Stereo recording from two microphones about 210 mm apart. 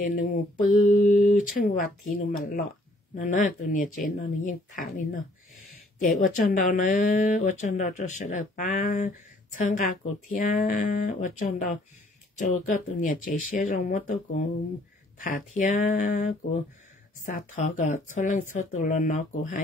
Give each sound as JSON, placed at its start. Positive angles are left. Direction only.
{"t": 0.0, "sound": "speech", "side_deg": 40}
{"t": 6.0, "sound": "speech", "side_deg": 40}
{"t": 15.1, "sound": "speech", "side_deg": 40}